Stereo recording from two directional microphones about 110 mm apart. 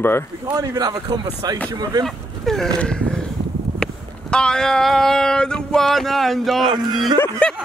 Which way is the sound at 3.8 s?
10° left (ahead or behind).